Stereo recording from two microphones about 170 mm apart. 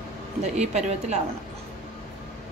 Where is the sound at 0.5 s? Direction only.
40° right (ahead or behind).